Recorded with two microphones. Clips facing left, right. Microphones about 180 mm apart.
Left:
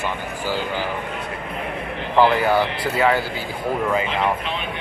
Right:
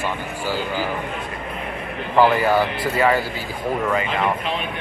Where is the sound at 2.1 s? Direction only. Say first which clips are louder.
Even; 5° right (ahead or behind).